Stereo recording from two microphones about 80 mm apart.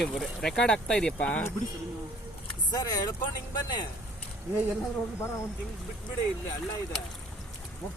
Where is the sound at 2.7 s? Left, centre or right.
Left.